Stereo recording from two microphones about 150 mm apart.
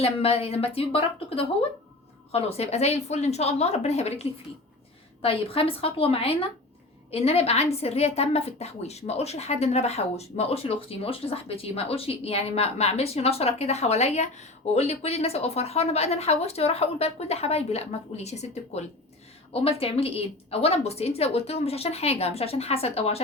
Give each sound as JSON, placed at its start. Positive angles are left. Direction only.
{"t": 0.0, "sound": "a woman's voice", "side_deg": 40}